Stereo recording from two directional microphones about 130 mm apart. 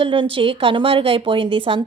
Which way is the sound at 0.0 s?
40° right (ahead or behind).